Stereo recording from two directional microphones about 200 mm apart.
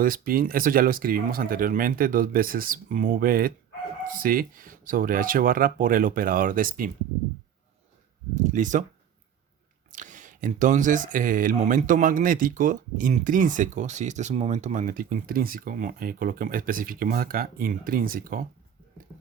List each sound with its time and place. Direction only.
0.0 s speech: 45° right (ahead or behind)
8.4 s speech: 40° right (ahead or behind)
9.9 s speech: 40° right (ahead or behind)